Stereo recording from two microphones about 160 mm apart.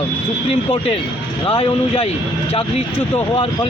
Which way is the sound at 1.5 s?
35° left (ahead or behind).